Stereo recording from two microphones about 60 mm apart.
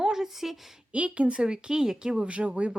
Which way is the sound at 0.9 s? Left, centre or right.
Right.